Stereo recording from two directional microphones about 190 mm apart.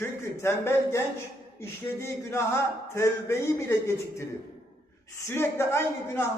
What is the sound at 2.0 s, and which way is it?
A man's voice, 15° left (ahead or behind).